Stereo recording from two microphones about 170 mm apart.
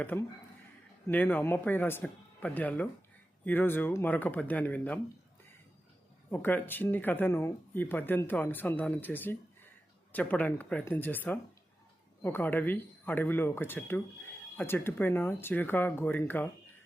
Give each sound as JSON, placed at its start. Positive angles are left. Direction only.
{"t": 0.0, "sound": "speech", "side_deg": 10}
{"t": 6.3, "sound": "speech", "side_deg": 10}